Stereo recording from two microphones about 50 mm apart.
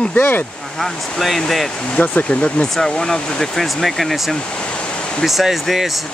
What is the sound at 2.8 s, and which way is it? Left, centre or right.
Speech, centre.